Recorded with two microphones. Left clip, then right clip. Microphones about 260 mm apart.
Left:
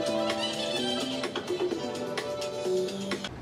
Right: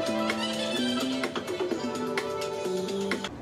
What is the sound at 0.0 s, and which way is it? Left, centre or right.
Music, centre.